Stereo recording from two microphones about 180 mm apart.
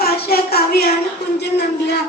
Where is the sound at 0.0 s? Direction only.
60° left (ahead or behind).